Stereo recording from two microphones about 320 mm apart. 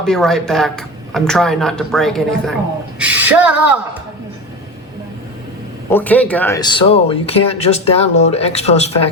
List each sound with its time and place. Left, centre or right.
0.0 s speech: centre
5.9 s speech: centre